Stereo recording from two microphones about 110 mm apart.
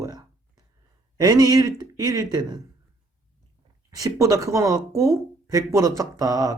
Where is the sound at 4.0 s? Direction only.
30° right (ahead or behind).